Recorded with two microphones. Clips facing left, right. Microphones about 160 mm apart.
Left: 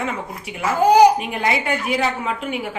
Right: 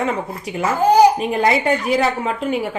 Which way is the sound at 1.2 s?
35° right (ahead or behind).